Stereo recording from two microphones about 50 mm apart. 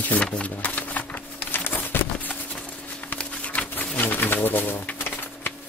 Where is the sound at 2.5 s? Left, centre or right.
Left.